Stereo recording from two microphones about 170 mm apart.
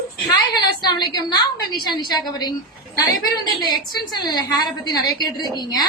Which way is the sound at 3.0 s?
20° left (ahead or behind).